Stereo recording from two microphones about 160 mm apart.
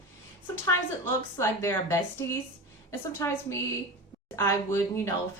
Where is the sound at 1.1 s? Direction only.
15° left (ahead or behind).